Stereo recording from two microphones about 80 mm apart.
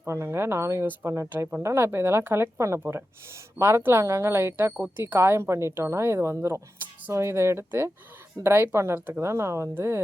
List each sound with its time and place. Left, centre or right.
0.0 s a woman's voice: right
9.0 s speech: right
9.2 s a woman's voice: right